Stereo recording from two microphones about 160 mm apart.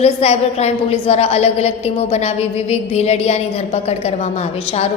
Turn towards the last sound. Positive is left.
turn(degrees=45)  # may be behind; listen again after turning